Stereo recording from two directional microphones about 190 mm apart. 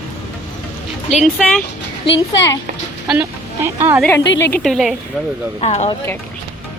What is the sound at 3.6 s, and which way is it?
Speech, 15° right (ahead or behind).